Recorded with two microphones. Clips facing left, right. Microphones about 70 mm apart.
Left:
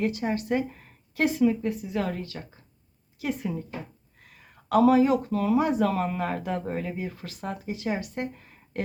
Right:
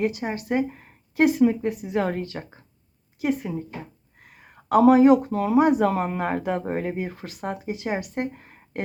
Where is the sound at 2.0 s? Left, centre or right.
Right.